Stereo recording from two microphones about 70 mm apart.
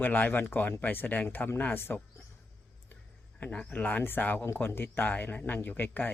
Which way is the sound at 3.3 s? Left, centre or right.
Left.